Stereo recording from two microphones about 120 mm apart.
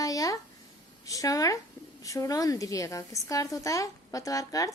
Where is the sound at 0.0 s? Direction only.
30° left (ahead or behind).